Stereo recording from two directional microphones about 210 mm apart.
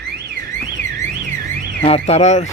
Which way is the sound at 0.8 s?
50° left (ahead or behind).